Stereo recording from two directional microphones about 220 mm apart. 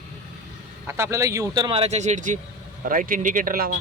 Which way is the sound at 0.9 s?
10° right (ahead or behind).